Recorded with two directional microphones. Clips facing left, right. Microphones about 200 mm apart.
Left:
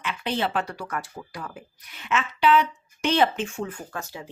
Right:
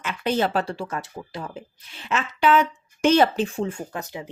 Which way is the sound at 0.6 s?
25° right (ahead or behind).